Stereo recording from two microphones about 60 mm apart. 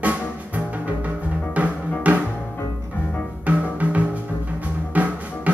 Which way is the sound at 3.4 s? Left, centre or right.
Right.